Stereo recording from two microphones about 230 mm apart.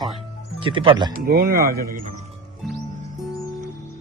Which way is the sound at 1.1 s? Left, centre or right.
Right.